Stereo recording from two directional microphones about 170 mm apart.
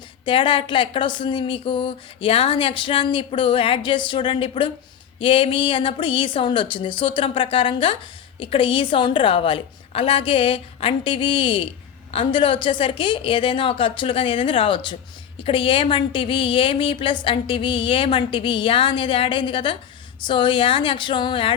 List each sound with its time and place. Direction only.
0.3 s a woman's voice: 30° left (ahead or behind)